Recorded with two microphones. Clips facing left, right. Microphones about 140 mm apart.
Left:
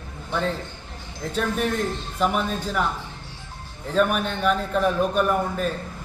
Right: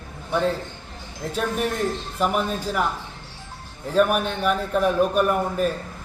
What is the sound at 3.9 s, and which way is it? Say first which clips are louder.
A man's voice: right 2 dB; 5° right (ahead or behind).